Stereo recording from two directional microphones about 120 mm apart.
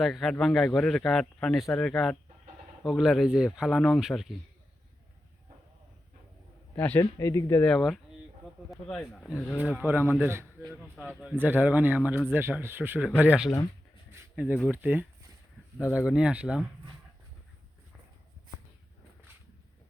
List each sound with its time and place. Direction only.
0.0 s speech: centre (ahead or behind)
3.8 s speech: 5° left (ahead or behind)
6.7 s a man's voice: 15° left (ahead or behind)
7.0 s speech: 25° left (ahead or behind)
7.6 s speech: 5° left (ahead or behind)
9.6 s a man's voice: 15° right (ahead or behind)
14.1 s a sound: 15° right (ahead or behind)
14.7 s speech: 15° right (ahead or behind)